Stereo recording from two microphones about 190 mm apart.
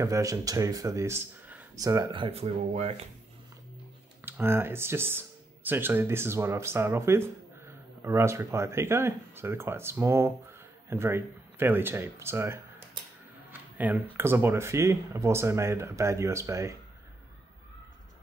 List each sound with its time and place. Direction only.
0.0 s speech: 15° right (ahead or behind); by 3.1 s 35° right (ahead or behind)
4.2 s speech: 10° right (ahead or behind)